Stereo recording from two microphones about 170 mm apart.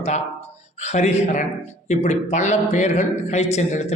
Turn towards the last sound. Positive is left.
turn(degrees=40)  # may be behind; listen again after turning